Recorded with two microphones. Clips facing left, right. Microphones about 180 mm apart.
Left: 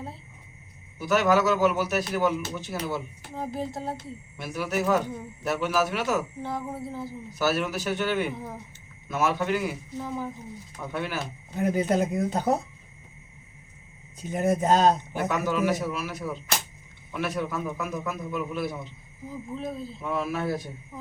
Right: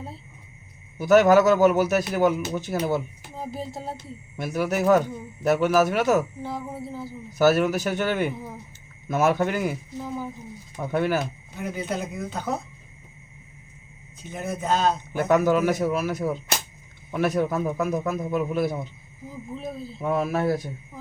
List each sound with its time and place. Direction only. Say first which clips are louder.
0.9 s a man's voice: right 6 dB; 45° right (ahead or behind)
3.3 s speech: left 1 dB; centre (ahead or behind)
4.4 s a man's voice: right 4 dB; 45° right (ahead or behind)
6.4 s speech: even; centre (ahead or behind)
7.3 s a man's voice: right 7 dB; 45° right (ahead or behind)
10.9 s a man's voice: right 8 dB; 45° right (ahead or behind)
11.6 s speech: left 6 dB; 40° left (ahead or behind)
14.2 s speech: left 6 dB; 40° left (ahead or behind)
15.1 s a man's voice: right 7 dB; 45° right (ahead or behind)
19.5 s speech: even; 5° right (ahead or behind)
20.0 s a man's voice: right 6 dB; 45° right (ahead or behind)